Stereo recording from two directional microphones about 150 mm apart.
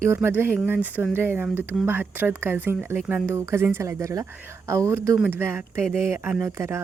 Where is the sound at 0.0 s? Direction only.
15° right (ahead or behind).